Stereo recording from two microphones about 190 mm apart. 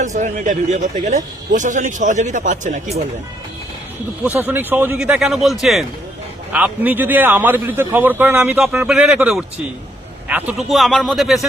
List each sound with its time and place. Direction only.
0.0 s a man's voice: 40° right (ahead or behind)
4.2 s speech: 10° right (ahead or behind)